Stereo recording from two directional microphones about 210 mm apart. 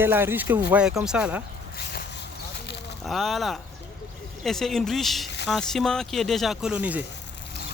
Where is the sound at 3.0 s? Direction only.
Centre (ahead or behind).